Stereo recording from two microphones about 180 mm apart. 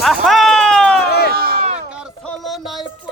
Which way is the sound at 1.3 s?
55° right (ahead or behind).